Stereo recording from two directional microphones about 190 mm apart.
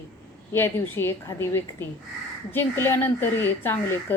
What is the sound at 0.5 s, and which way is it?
A woman's voice, 10° left (ahead or behind).